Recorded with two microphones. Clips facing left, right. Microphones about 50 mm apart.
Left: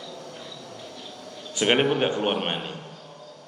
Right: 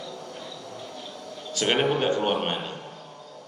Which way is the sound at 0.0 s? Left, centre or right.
Centre.